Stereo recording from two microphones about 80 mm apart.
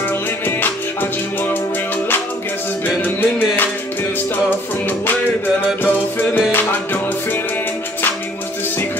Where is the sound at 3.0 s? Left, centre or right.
Left.